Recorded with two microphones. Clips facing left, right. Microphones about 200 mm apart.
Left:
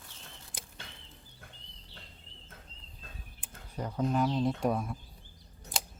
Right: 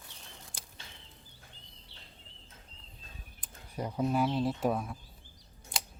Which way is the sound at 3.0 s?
55° left (ahead or behind).